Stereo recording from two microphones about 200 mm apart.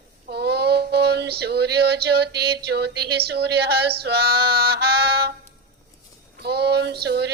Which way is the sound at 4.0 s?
50° right (ahead or behind).